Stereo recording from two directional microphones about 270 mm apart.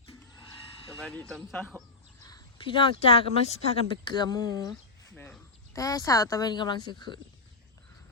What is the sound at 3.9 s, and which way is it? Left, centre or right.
Speech, centre.